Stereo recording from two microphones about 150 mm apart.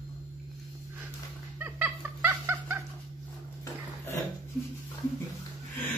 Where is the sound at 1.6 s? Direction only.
15° right (ahead or behind).